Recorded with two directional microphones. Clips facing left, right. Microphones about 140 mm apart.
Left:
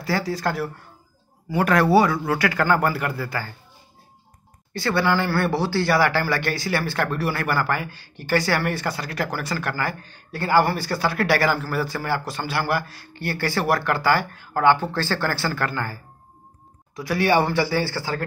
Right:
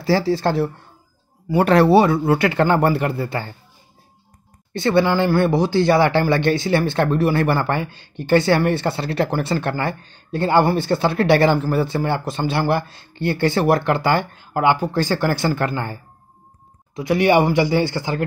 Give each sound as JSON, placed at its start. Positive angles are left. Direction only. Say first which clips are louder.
{"t": 0.0, "sound": "speech", "louder": "right 6 dB", "side_deg": -30}
{"t": 4.7, "sound": "speech", "louder": "right 5 dB", "side_deg": -20}